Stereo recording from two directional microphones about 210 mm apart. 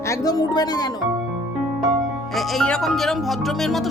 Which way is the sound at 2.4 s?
Centre (ahead or behind).